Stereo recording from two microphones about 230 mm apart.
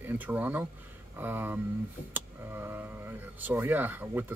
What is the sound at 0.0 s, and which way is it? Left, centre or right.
Speech, centre.